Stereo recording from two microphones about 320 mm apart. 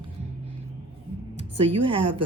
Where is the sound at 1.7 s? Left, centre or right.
Centre.